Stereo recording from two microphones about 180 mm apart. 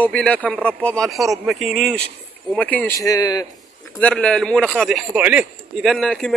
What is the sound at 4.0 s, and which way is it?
Speech, 5° left (ahead or behind).